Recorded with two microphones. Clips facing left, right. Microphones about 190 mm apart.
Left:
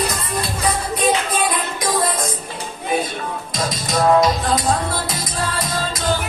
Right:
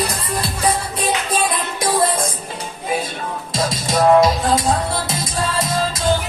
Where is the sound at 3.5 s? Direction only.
25° right (ahead or behind).